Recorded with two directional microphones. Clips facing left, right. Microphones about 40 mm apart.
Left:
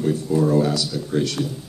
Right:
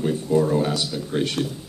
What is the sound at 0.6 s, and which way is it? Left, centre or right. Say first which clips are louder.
Speech: left 2 dB; right.